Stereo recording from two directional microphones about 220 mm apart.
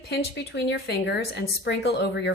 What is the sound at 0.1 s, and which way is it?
Speech, 50° left (ahead or behind).